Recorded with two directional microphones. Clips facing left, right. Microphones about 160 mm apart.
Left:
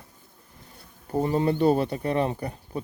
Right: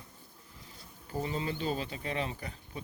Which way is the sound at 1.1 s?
55° left (ahead or behind).